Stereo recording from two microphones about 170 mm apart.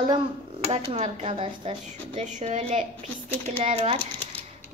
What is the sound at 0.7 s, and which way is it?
A child's voice, 40° right (ahead or behind).